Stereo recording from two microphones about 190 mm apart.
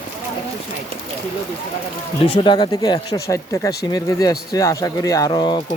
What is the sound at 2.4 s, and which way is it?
Speech, 25° left (ahead or behind).